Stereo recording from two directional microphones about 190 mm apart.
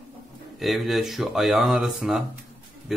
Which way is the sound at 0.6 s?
Centre (ahead or behind).